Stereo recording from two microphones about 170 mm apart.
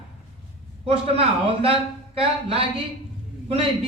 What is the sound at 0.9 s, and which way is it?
Speech, 35° right (ahead or behind).